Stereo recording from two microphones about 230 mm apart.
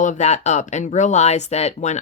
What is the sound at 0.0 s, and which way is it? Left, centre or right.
A woman's voice, left.